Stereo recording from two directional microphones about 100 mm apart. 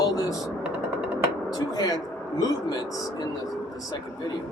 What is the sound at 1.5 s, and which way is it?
Speech, 40° left (ahead or behind).